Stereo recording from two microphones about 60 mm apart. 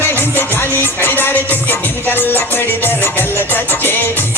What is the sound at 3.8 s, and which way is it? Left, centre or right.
Music, left.